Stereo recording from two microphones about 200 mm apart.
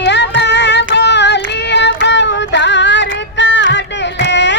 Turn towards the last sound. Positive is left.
turn(degrees=60)  # may be behind; listen again after turning